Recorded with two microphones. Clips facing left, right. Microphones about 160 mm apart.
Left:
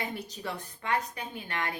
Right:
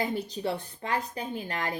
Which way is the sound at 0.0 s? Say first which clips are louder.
Right 6 dB; 35° right (ahead or behind).